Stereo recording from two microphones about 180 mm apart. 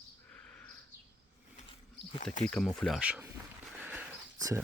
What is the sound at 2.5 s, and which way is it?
Speech, 5° left (ahead or behind).